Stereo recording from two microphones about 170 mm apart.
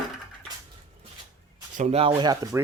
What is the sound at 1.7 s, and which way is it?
Speech, 40° right (ahead or behind).